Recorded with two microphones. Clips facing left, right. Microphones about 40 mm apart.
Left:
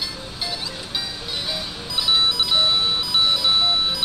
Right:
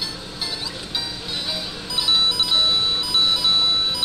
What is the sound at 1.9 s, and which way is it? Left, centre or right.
Music, centre.